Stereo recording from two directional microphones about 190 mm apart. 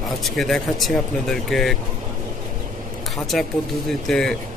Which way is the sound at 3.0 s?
Centre (ahead or behind).